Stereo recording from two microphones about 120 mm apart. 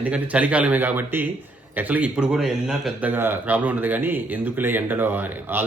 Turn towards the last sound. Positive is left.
turn(degrees=-15)  # may be behind; listen again after turning